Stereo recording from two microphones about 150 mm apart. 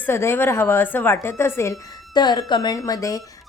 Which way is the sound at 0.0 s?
15° left (ahead or behind).